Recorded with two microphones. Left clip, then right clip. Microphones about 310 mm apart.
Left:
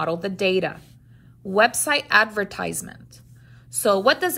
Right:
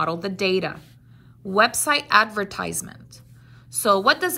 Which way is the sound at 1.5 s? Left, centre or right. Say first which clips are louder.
Even; right.